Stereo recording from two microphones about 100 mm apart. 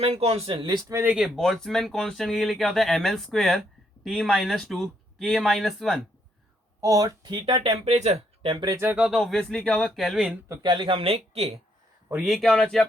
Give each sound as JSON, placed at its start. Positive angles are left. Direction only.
{"t": 0.0, "sound": "speech", "side_deg": -90}
{"t": 0.8, "sound": "speech", "side_deg": -35}
{"t": 1.0, "sound": "speech", "side_deg": -10}
{"t": 1.4, "sound": "speech", "side_deg": 5}
{"t": 6.8, "sound": "speech", "side_deg": -35}
{"t": 7.9, "sound": "speech", "side_deg": -80}
{"t": 9.0, "sound": "speech", "side_deg": -5}
{"t": 9.2, "sound": "speech", "side_deg": 5}
{"t": 10.6, "sound": "speech", "side_deg": -50}
{"t": 12.1, "sound": "speech", "side_deg": -5}